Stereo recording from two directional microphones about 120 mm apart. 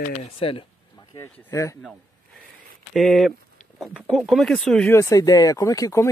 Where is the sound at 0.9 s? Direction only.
30° left (ahead or behind).